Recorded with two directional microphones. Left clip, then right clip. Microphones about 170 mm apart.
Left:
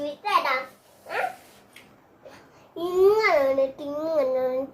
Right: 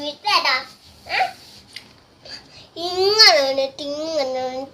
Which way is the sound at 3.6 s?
20° left (ahead or behind).